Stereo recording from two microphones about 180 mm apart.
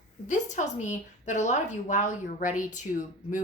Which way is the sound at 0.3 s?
40° left (ahead or behind).